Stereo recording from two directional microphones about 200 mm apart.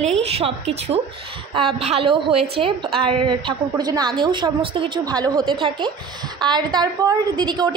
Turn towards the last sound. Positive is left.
turn(degrees=-20)  # may be behind; listen again after turning